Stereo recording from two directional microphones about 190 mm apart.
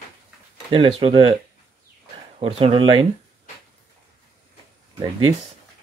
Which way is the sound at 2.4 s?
30° right (ahead or behind).